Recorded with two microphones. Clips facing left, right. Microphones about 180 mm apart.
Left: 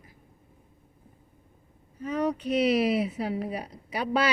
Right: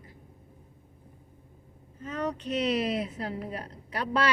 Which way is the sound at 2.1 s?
10° left (ahead or behind).